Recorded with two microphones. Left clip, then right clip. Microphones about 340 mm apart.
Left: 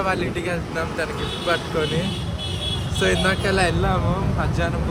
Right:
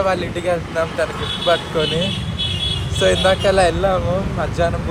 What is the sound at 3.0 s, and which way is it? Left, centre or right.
Speech, centre.